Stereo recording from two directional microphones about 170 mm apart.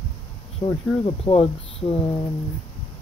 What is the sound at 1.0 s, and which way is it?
Speech, 35° left (ahead or behind).